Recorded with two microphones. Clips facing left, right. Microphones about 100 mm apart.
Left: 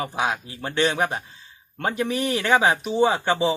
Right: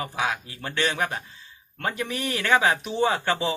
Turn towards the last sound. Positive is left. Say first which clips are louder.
# left 4 dB
turn(degrees=15)  # may be behind; listen again after turning